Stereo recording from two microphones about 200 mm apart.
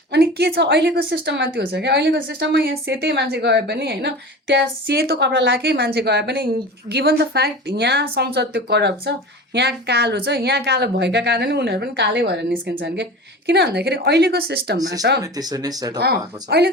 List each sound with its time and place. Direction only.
0.1 s a woman's voice: 55° right (ahead or behind)
13.5 s a woman's voice: 55° right (ahead or behind)
15.2 s speech: 20° right (ahead or behind)
16.0 s a woman's voice: 55° right (ahead or behind)